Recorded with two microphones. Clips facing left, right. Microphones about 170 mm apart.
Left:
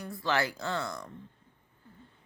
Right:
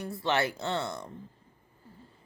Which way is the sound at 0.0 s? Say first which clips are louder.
Right 2 dB; 25° right (ahead or behind).